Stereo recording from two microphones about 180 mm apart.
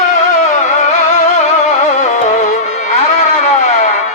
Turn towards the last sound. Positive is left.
turn(degrees=40)  # may be behind; listen again after turning